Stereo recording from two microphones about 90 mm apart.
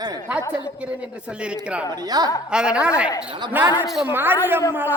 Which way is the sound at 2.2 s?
50° right (ahead or behind).